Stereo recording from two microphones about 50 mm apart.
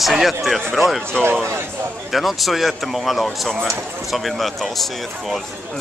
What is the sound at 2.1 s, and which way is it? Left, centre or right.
Speech, centre.